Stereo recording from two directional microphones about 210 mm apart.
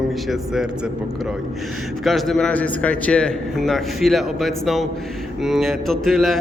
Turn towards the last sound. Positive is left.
turn(degrees=0)  # may be behind; listen again after turning